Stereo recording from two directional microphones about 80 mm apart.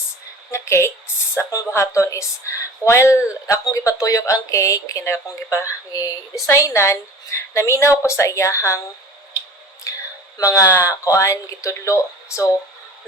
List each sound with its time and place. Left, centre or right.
0.5 s a woman's voice: left
9.9 s a sound: left
10.3 s a woman's voice: left